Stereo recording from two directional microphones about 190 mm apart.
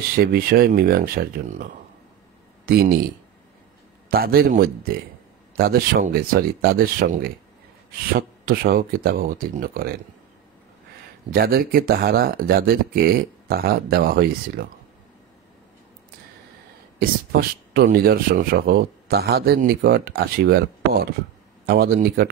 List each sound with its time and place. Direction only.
0.2 s speech: 50° right (ahead or behind)
2.6 s speech: 55° right (ahead or behind)
4.1 s speech: 50° right (ahead or behind)
8.5 s speech: 50° right (ahead or behind)
11.3 s speech: 50° right (ahead or behind)
17.0 s speech: 50° right (ahead or behind)